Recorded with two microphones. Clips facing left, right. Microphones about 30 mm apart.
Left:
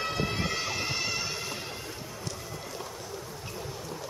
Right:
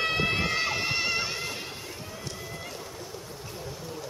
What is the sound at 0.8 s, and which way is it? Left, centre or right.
Music, right.